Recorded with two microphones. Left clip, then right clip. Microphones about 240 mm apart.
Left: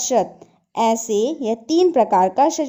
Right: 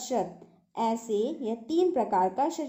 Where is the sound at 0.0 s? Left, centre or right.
Left.